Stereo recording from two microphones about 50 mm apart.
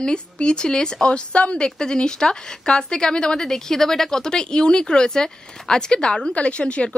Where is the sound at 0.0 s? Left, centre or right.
Centre.